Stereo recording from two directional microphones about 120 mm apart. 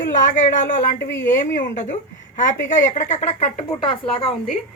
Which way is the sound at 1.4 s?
90° left.